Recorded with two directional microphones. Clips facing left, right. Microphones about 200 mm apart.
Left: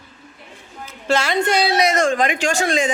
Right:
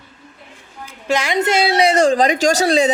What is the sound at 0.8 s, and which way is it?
A woman's voice, 15° right (ahead or behind).